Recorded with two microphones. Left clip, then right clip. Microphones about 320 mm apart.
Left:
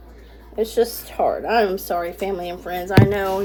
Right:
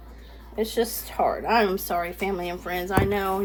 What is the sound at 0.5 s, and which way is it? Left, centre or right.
Speech, centre.